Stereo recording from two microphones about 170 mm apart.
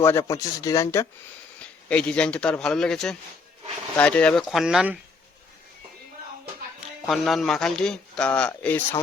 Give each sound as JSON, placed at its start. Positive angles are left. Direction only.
{"t": 0.0, "sound": "speech", "side_deg": 15}
{"t": 1.9, "sound": "a man's voice", "side_deg": 5}
{"t": 7.1, "sound": "a man's voice", "side_deg": 0}